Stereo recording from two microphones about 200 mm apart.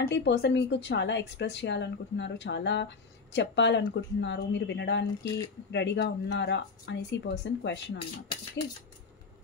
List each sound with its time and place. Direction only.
0.0 s speech: 60° left (ahead or behind)
5.2 s speech: 20° left (ahead or behind)
5.7 s speech: 60° left (ahead or behind)